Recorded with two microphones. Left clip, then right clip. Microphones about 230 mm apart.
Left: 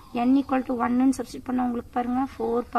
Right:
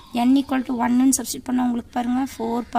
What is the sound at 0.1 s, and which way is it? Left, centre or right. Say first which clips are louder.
Speech: right 3 dB; right.